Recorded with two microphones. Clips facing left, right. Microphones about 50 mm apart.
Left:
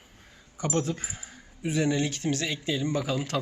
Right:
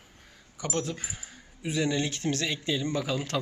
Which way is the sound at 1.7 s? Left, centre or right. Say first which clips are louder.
Left 2 dB; right.